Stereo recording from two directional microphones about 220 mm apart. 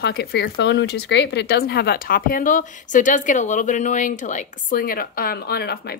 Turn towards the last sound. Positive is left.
turn(degrees=45)  # may be behind; listen again after turning